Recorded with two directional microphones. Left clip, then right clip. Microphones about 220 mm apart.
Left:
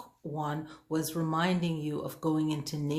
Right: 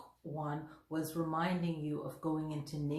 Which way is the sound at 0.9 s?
45° left (ahead or behind).